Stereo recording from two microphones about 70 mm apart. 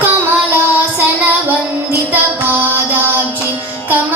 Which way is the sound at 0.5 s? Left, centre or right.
Right.